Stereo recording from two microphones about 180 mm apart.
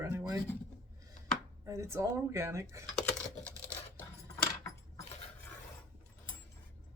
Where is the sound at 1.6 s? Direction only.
15° right (ahead or behind).